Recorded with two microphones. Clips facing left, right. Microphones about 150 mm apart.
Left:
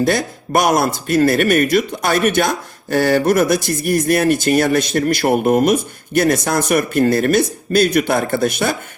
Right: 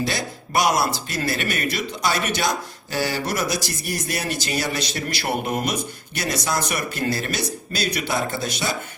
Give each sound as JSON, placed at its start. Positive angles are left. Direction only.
{"t": 0.0, "sound": "speech", "side_deg": 50}